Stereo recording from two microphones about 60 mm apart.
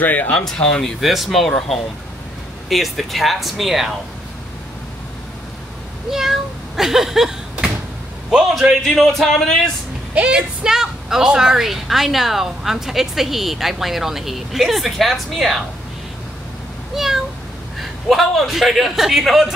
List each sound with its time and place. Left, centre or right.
0.0 s speech: left
0.5 s a woman's voice: centre
6.0 s speech: centre
8.8 s a woman's voice: centre
10.1 s a woman's voice: centre
16.9 s meow: centre
17.7 s a woman's voice: centre